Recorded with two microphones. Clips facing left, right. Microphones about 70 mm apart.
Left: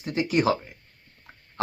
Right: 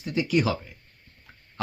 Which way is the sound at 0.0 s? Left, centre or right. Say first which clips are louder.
Left 1 dB; left.